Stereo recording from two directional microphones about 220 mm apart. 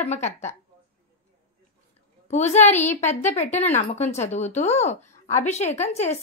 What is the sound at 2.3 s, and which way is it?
A woman's voice, 30° left (ahead or behind).